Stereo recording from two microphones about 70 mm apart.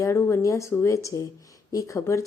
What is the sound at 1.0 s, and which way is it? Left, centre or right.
Speech, left.